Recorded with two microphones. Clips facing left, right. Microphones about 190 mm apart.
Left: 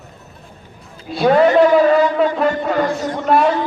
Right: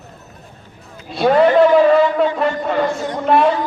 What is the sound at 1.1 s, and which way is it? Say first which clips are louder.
A man's voice: even; centre (ahead or behind).